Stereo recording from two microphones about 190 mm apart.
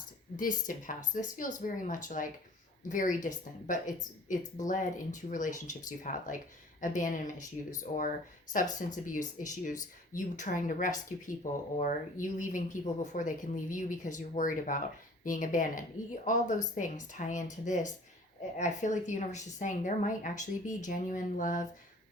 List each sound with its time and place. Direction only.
0.3 s speech: 45° left (ahead or behind)